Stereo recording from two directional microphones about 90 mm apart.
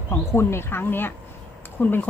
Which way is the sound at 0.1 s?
25° left (ahead or behind).